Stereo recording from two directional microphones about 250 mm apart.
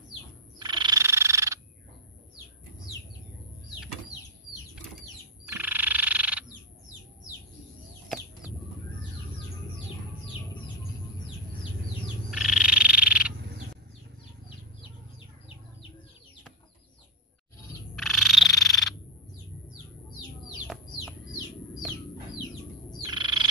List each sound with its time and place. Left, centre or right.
0.6 s frog: centre
5.5 s frog: centre
12.3 s frog: centre
17.9 s frog: centre
23.0 s frog: centre